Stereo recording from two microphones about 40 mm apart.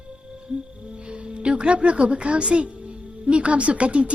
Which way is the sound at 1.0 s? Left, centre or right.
Right.